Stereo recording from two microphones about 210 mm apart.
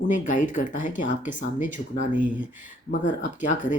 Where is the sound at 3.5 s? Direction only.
35° left (ahead or behind).